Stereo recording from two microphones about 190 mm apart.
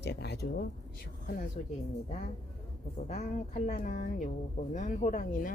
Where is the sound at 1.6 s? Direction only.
35° left (ahead or behind).